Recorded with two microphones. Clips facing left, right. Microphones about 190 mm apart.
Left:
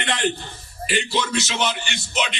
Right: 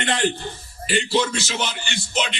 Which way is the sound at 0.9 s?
30° right (ahead or behind).